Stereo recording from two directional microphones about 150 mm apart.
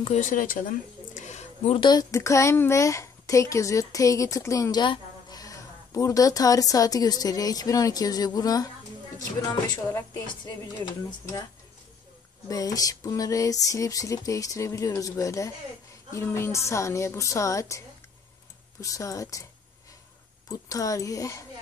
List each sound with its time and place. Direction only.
0.0 s speech: 50° left (ahead or behind)
1.8 s speech: 25° left (ahead or behind)
10.4 s speech: 30° left (ahead or behind)
12.4 s speech: 25° left (ahead or behind)
20.4 s speech: 20° left (ahead or behind)